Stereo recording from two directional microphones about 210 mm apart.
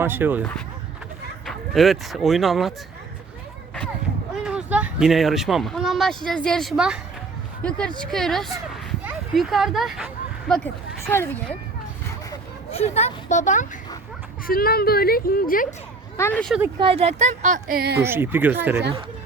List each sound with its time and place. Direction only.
0.0 s speech: 10° right (ahead or behind)
1.5 s speech: centre (ahead or behind)
4.4 s speech: 5° right (ahead or behind)
10.5 s speech: 10° left (ahead or behind)
12.7 s a woman's voice: 30° left (ahead or behind)
16.1 s speech: 10° left (ahead or behind)
16.8 s a woman's voice: 30° right (ahead or behind); by 18.0 s 50° right (ahead or behind)
18.0 s speech: 10° right (ahead or behind)